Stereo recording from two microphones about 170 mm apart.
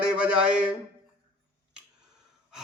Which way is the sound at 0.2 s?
5° right (ahead or behind).